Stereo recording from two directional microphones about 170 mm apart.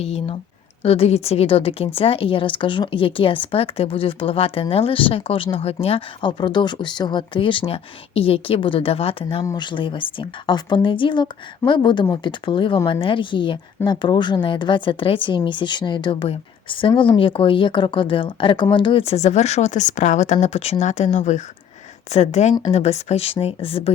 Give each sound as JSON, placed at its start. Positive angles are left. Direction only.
{"t": 0.0, "sound": "speech", "side_deg": 35}
{"t": 9.4, "sound": "speech", "side_deg": 25}